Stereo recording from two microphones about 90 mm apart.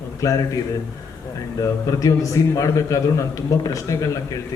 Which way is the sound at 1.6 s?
35° left (ahead or behind).